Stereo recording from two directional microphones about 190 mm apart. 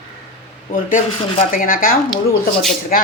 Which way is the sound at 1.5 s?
45° left (ahead or behind).